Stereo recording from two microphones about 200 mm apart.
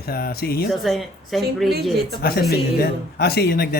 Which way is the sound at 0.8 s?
Centre (ahead or behind).